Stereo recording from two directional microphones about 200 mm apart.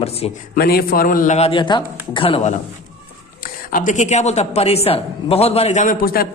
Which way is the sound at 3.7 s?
40° left (ahead or behind).